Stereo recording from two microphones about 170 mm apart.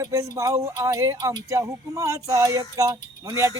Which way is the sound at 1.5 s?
15° right (ahead or behind).